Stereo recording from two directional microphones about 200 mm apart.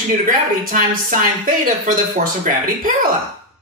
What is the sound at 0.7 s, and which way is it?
Speech, 45° right (ahead or behind).